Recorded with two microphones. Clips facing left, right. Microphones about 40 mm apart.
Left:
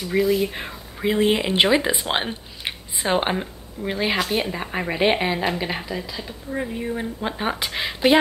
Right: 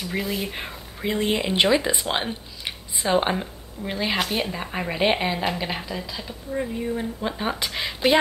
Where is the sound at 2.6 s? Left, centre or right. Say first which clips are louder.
Left 3 dB; left.